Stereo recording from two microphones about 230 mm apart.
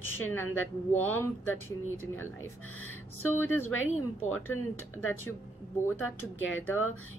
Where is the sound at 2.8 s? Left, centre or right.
Left.